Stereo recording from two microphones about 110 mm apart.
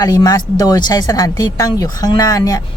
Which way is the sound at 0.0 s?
35° left (ahead or behind).